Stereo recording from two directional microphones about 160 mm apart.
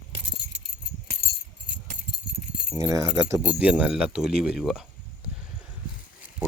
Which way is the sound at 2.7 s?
20° right (ahead or behind).